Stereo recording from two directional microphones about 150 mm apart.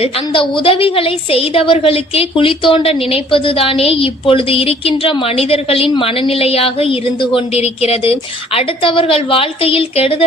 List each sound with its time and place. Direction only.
0.0 s a woman's voice: 40° left (ahead or behind)